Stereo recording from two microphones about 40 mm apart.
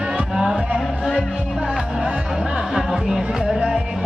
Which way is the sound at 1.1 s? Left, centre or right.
Right.